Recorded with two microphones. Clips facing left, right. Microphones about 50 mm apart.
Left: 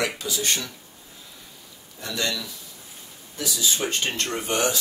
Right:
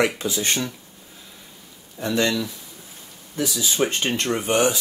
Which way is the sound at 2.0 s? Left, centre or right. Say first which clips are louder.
Right 7 dB; right.